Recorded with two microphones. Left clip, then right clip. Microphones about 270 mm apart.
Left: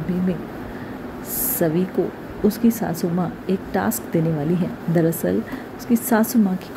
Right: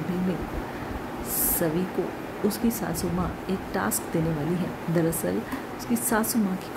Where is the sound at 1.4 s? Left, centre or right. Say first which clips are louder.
Left 6 dB; centre.